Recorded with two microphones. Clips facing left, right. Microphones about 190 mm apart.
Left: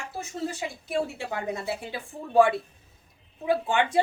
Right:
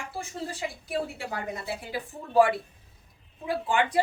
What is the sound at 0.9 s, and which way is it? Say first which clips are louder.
Speech: left 4 dB; 25° left (ahead or behind).